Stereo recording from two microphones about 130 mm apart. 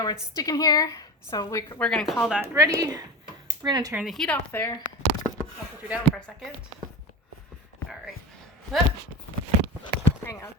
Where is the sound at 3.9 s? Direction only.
5° right (ahead or behind).